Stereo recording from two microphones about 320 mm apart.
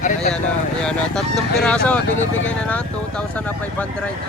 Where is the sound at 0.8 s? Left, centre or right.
Centre.